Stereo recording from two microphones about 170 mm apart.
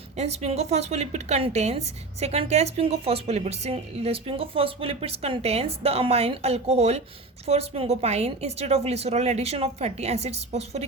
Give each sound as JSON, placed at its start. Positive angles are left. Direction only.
{"t": 0.2, "sound": "speech", "side_deg": -40}